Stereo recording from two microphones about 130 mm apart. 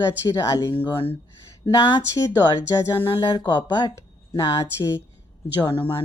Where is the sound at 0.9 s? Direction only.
40° left (ahead or behind).